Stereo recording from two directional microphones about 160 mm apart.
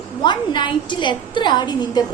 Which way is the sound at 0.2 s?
30° left (ahead or behind).